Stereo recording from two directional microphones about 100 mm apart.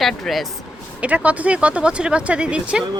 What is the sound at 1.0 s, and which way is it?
Speech, 15° right (ahead or behind).